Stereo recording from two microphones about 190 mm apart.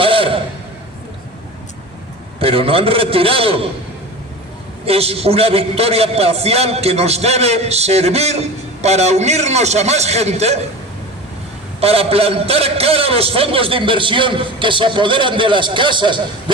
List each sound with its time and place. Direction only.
0.0 s a sound: 30° right (ahead or behind)
2.4 s a man's voice: 30° right (ahead or behind)
4.9 s a man's voice: 30° right (ahead or behind)
11.8 s a man's voice: 30° right (ahead or behind)